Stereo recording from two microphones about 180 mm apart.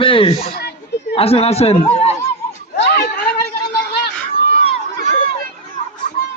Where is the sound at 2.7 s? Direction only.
65° left (ahead or behind).